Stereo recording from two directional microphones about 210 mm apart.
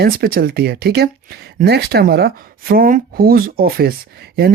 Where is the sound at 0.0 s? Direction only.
45° right (ahead or behind).